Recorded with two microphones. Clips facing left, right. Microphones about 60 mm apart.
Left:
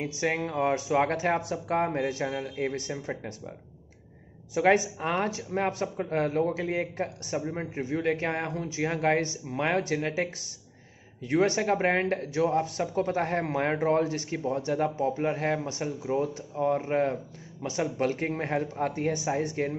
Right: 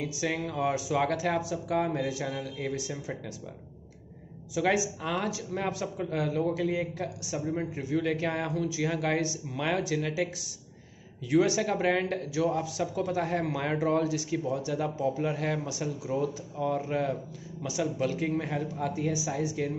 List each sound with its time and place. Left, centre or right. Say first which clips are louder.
0.0 s speech: left 2 dB; left
4.6 s speech: left 4 dB; left